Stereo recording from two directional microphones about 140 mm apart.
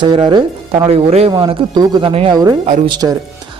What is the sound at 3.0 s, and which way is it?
Speech, 30° right (ahead or behind).